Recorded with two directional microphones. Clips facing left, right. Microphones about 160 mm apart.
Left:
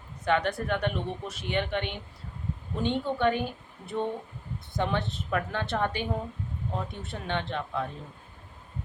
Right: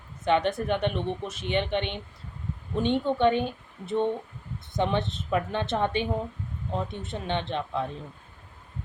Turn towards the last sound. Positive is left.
turn(degrees=-20)  # may be behind; listen again after turning